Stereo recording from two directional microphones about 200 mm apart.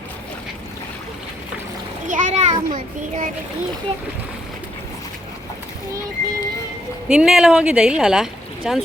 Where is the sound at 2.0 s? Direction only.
40° right (ahead or behind).